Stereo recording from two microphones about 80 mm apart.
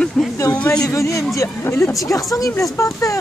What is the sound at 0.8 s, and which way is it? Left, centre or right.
Speech, left.